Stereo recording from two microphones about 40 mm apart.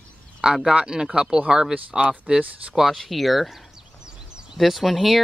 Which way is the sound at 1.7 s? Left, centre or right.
Right.